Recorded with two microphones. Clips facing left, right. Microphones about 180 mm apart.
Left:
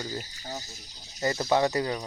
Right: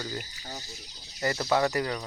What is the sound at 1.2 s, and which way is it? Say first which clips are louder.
Speech: left 1 dB; 20° left (ahead or behind).